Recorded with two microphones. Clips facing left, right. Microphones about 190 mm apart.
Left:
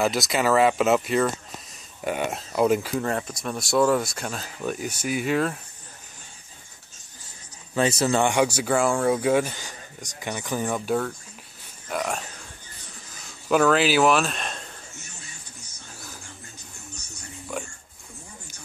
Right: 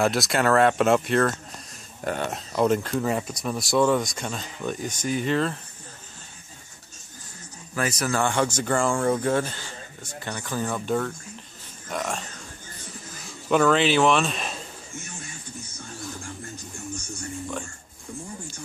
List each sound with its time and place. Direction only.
0.0 s speech: centre (ahead or behind)
7.7 s speech: 25° left (ahead or behind)
8.5 s speech: 5° left (ahead or behind)
13.5 s speech: 5° left (ahead or behind)